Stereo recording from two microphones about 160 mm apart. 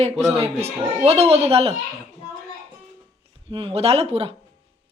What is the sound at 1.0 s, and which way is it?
Speech, 40° right (ahead or behind).